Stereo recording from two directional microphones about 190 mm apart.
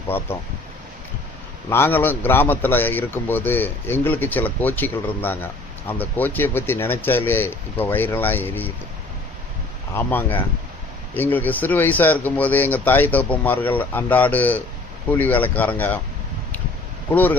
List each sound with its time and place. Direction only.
0.1 s a man's voice: 10° left (ahead or behind)
1.7 s a man's voice: 10° left (ahead or behind)
9.9 s a man's voice: 10° left (ahead or behind)
17.1 s a man's voice: 10° left (ahead or behind)